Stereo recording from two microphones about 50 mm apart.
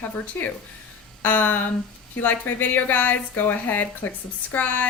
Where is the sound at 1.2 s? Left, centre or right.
Left.